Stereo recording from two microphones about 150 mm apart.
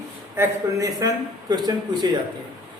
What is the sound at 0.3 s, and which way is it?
Speech, 25° right (ahead or behind).